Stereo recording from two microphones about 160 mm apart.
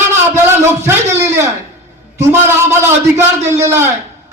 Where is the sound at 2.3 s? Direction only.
15° right (ahead or behind).